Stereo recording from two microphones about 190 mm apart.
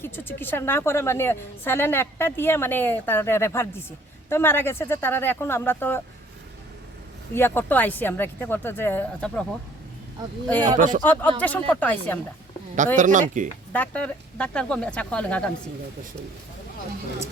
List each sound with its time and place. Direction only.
0.0 s a woman's voice: 10° left (ahead or behind)
7.3 s a woman's voice: 10° left (ahead or behind)
10.8 s speech: 40° right (ahead or behind)
11.0 s a woman's voice: 10° left (ahead or behind)
13.0 s speech: 40° right (ahead or behind)
13.7 s speech: 5° left (ahead or behind)